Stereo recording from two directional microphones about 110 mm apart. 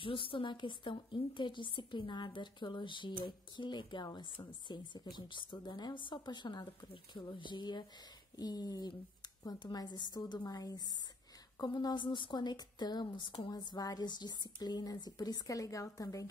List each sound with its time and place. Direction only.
0.0 s a woman's voice: 50° left (ahead or behind); by 16.3 s 30° left (ahead or behind)